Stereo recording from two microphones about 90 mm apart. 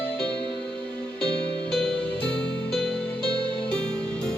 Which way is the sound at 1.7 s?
10° left (ahead or behind).